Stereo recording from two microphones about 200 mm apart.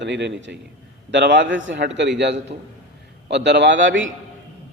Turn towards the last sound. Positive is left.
turn(degrees=-70)  # may be behind; listen again after turning